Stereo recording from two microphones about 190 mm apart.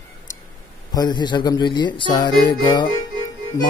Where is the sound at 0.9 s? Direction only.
20° left (ahead or behind).